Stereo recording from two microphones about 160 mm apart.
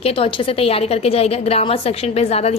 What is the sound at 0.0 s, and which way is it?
A woman's voice, 35° left (ahead or behind).